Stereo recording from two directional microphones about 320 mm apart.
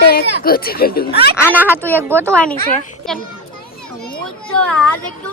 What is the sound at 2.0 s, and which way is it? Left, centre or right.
Speech, centre.